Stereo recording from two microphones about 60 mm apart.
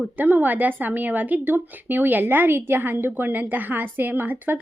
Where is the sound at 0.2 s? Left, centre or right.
Right.